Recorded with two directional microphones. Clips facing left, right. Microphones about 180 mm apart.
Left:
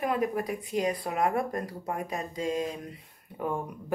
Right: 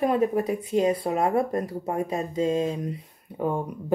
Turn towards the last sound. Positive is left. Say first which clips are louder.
# right 5 dB
turn(degrees=-25)  # may be behind; listen again after turning